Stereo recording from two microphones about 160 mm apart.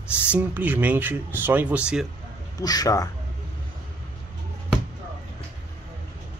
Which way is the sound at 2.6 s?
25° left (ahead or behind).